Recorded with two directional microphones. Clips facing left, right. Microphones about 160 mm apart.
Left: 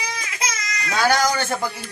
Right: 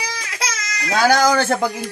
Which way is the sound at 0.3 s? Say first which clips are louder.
Right 1 dB; 80° right.